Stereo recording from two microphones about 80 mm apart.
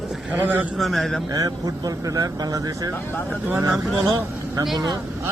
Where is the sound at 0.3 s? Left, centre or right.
Right.